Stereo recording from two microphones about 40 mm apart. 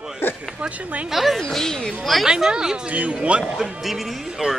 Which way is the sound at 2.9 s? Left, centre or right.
Right.